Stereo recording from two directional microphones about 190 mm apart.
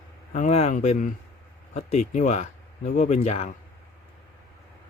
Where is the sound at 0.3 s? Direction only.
35° left (ahead or behind).